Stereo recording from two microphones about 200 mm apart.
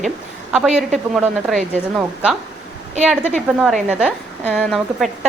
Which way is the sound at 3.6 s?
5° right (ahead or behind).